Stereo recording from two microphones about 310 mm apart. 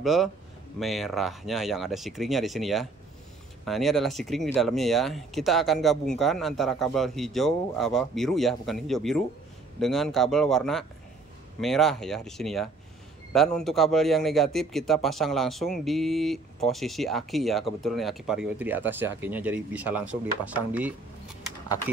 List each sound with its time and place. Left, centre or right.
0.0 s speech: centre